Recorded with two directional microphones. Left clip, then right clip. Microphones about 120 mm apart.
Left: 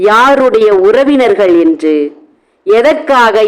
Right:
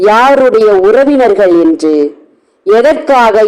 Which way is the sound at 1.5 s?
30° right (ahead or behind).